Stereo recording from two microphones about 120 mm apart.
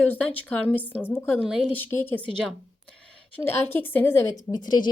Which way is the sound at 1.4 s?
5° right (ahead or behind).